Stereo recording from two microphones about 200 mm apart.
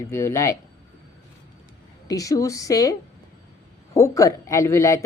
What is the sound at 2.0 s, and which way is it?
Speech, 15° left (ahead or behind).